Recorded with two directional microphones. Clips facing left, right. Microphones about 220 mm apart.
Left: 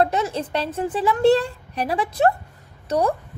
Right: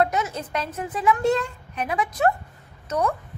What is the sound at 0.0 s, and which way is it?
A woman's voice, 30° left (ahead or behind).